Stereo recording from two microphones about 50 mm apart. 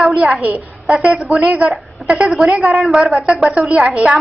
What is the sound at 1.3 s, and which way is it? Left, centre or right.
Speech, right.